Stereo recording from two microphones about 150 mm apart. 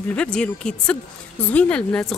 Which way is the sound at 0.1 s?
5° left (ahead or behind).